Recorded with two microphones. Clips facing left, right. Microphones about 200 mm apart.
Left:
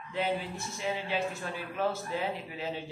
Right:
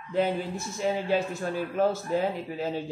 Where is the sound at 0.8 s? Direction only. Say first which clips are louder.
Right 6 dB; 45° right (ahead or behind).